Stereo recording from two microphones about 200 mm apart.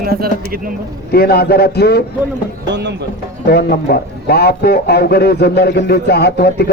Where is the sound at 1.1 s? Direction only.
50° left (ahead or behind).